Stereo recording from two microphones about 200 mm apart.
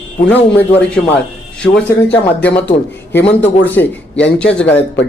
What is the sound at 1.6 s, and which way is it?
Speech, 5° left (ahead or behind).